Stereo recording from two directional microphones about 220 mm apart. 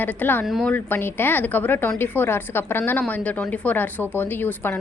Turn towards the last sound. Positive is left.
turn(degrees=10)  # may be behind; listen again after turning